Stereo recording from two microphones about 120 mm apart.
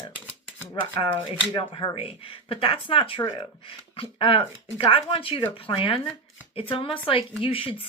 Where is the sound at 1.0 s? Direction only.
45° left (ahead or behind).